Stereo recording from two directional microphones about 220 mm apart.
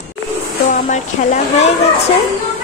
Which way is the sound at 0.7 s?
30° left (ahead or behind).